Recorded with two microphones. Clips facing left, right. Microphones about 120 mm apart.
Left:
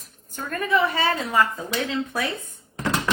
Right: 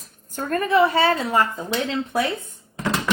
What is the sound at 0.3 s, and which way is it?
A woman's voice, 40° right (ahead or behind).